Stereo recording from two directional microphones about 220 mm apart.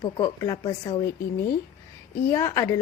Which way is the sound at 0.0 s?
20° left (ahead or behind).